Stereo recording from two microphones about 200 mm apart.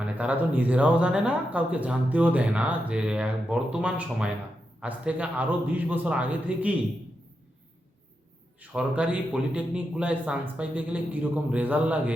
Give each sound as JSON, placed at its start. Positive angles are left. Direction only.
{"t": 0.0, "sound": "speech", "side_deg": -5}
{"t": 8.7, "sound": "speech", "side_deg": -5}